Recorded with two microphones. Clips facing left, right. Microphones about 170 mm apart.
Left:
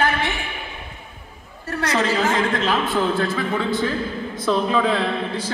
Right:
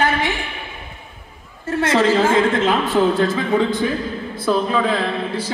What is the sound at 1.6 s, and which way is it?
A woman's voice, 25° right (ahead or behind).